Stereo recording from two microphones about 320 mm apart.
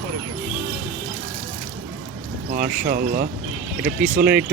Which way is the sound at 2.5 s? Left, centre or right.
Right.